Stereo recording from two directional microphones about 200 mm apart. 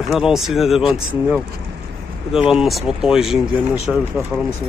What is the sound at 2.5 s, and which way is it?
Speech, centre (ahead or behind).